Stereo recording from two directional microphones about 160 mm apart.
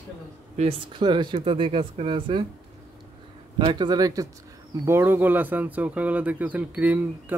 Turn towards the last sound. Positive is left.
turn(degrees=-10)  # may be behind; listen again after turning